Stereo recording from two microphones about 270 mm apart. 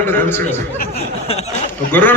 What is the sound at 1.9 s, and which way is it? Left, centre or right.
Speech, centre.